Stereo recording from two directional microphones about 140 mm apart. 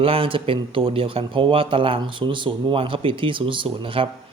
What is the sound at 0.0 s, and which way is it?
Speech, 40° right (ahead or behind).